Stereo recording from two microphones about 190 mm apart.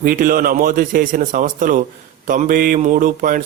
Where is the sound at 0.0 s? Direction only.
50° right (ahead or behind).